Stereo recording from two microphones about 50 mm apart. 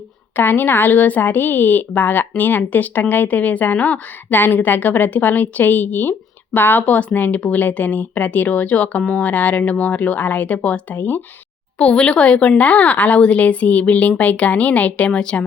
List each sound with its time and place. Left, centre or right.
0.3 s speech: left
11.8 s a woman's voice: left